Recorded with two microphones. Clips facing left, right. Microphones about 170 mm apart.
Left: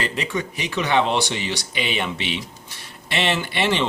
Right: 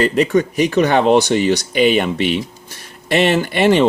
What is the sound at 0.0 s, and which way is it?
Speech, 45° right (ahead or behind).